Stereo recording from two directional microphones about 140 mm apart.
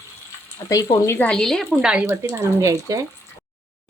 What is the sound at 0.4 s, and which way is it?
Speech, 20° left (ahead or behind).